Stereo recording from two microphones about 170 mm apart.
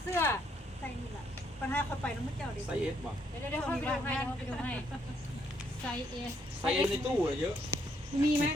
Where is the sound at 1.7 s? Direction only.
10° left (ahead or behind).